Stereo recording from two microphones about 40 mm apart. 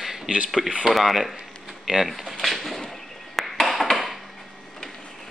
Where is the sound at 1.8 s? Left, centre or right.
Centre.